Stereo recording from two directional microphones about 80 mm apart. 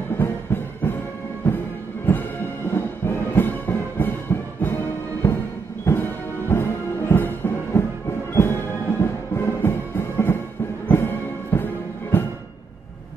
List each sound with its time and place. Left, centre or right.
0.2 s music: left
2.7 s music: left
6.5 s music: left